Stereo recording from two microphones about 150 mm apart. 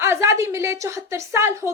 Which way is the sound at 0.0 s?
15° right (ahead or behind).